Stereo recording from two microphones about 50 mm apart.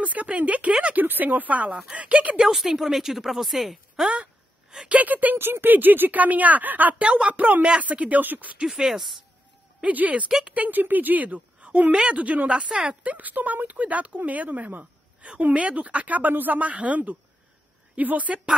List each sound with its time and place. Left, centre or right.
0.0 s speech: right
0.9 s speech: right
1.7 s speech: centre
2.0 s speech: right
2.4 s speech: centre
4.1 s a sound: right
4.8 s speech: right
7.0 s speech: right
8.6 s speech: centre
9.8 s a woman's voice: right